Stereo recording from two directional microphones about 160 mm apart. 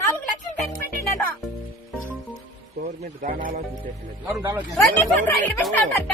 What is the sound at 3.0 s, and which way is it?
Speech, 55° right (ahead or behind).